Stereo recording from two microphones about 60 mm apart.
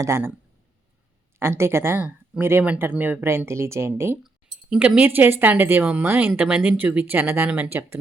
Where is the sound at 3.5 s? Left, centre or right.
Right.